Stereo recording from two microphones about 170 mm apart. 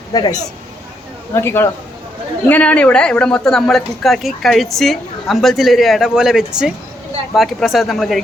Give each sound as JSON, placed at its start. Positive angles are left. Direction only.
{"t": 0.1, "sound": "a man's voice", "side_deg": 20}